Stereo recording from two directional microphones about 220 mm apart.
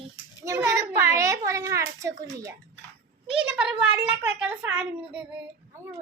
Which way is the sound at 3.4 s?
5° right (ahead or behind).